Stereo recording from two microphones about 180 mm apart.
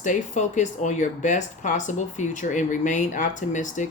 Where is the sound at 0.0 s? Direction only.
45° left (ahead or behind).